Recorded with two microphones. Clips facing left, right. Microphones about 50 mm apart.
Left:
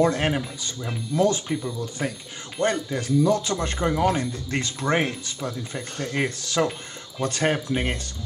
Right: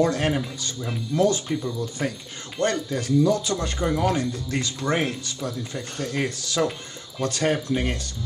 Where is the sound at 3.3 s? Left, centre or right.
Left.